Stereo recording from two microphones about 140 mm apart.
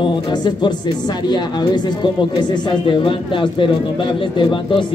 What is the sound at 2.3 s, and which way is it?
A man's voice, 35° left (ahead or behind).